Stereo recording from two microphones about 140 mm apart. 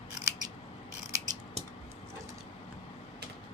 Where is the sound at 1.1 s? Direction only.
25° right (ahead or behind).